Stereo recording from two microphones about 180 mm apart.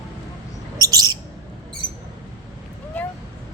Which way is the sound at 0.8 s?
20° right (ahead or behind).